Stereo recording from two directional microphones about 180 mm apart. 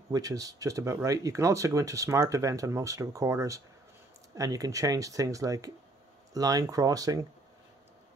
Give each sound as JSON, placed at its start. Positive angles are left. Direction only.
{"t": 0.1, "sound": "speech", "side_deg": -20}